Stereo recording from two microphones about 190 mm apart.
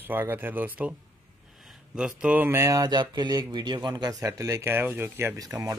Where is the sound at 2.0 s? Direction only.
5° right (ahead or behind).